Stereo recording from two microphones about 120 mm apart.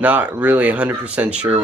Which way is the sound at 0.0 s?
15° right (ahead or behind).